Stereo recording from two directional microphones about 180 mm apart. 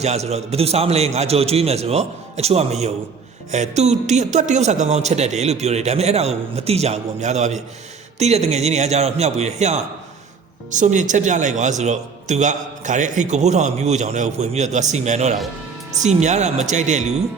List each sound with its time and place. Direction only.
0.0 s speech: 35° right (ahead or behind)